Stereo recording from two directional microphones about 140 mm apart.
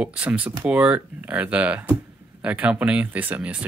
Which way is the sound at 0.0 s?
10° right (ahead or behind).